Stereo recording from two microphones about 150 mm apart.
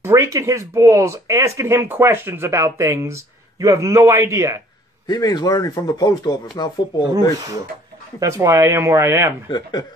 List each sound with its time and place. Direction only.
0.0 s speech: 20° right (ahead or behind)
5.0 s speech: 25° left (ahead or behind)
8.2 s speech: 20° right (ahead or behind)
9.5 s speech: 25° left (ahead or behind)